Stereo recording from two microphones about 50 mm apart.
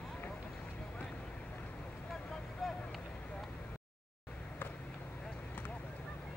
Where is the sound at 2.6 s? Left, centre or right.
Centre.